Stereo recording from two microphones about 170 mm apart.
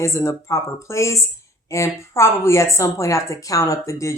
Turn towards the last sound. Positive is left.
turn(degrees=20)  # may be behind; listen again after turning